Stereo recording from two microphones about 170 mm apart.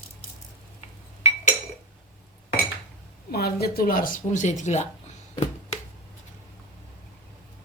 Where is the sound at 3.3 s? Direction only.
65° left (ahead or behind); by 4.8 s 45° left (ahead or behind).